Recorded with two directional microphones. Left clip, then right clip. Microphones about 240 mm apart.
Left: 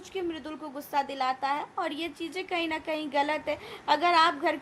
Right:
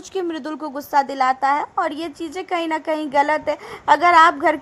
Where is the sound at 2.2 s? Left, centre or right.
Right.